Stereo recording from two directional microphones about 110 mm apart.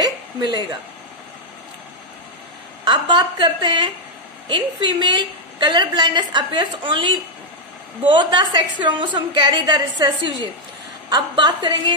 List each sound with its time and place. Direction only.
0.0 s hiccup: 40° right (ahead or behind)
2.8 s a woman's voice: 45° right (ahead or behind)